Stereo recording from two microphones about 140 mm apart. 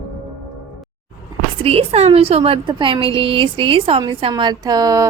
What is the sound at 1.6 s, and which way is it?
A woman's voice, 45° right (ahead or behind).